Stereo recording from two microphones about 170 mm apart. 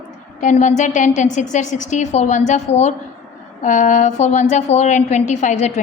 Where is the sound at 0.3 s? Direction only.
45° left (ahead or behind).